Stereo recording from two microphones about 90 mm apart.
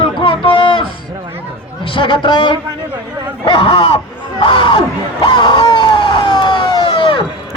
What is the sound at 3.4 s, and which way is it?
Speech, 85° left.